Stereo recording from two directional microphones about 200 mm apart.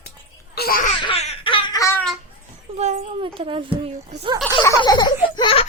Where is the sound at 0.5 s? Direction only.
45° left (ahead or behind).